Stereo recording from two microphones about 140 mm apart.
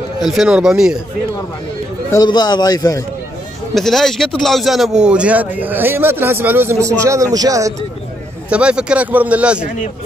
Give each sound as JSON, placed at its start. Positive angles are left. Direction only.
{"t": 0.2, "sound": "speech", "side_deg": 0}
{"t": 2.2, "sound": "a man's voice", "side_deg": 30}
{"t": 3.7, "sound": "speech", "side_deg": 0}
{"t": 8.5, "sound": "speech", "side_deg": -5}